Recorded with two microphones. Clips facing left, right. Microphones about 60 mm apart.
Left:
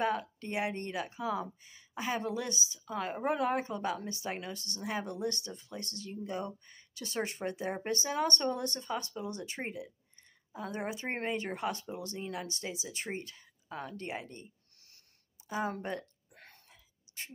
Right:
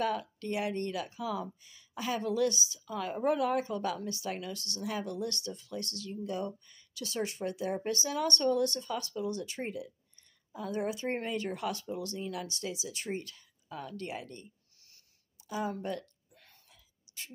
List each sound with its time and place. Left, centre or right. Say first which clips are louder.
0.0 s speech: even; left